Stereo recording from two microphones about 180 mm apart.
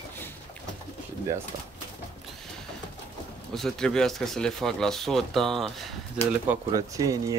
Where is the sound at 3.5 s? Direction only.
Centre (ahead or behind).